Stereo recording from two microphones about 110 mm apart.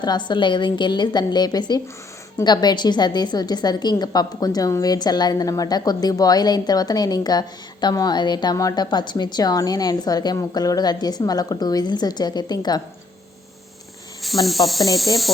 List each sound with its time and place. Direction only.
0.0 s a woman's voice: 40° left (ahead or behind)
14.4 s speech: centre (ahead or behind)